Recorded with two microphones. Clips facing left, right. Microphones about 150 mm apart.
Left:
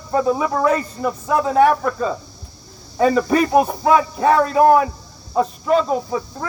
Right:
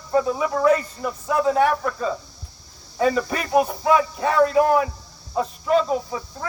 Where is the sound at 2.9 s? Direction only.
40° left (ahead or behind).